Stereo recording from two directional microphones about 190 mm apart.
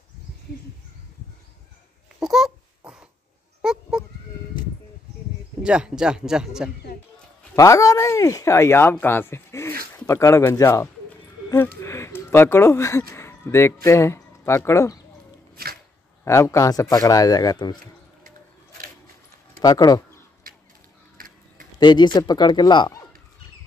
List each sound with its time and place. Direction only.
2.1 s babbling: centre (ahead or behind)
3.6 s a sound: 5° right (ahead or behind)
5.6 s speech: 5° right (ahead or behind)
7.5 s speech: 15° left (ahead or behind)
9.9 s a sound: 15° left (ahead or behind)
13.1 s music: 15° left (ahead or behind)
13.8 s speech: 15° left (ahead or behind)
15.5 s music: 50° right (ahead or behind)
16.3 s speech: 15° left (ahead or behind)
19.6 s speech: 20° left (ahead or behind)
20.5 s a sound: 50° right (ahead or behind)
21.7 s speech: 25° left (ahead or behind)